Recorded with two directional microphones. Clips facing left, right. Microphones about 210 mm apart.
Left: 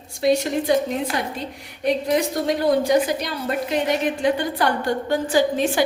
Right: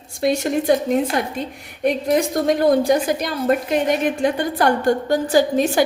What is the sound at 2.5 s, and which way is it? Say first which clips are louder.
A woman's voice: right 3 dB; 45° right (ahead or behind).